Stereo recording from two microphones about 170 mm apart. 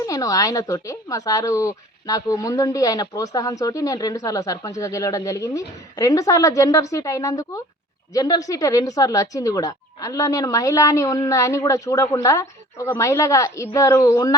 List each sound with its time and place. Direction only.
0.0 s speech: 20° left (ahead or behind)